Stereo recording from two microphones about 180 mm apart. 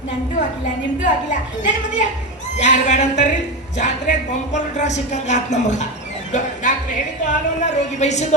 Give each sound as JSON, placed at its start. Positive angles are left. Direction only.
{"t": 1.6, "sound": "a woman's voice", "side_deg": 45}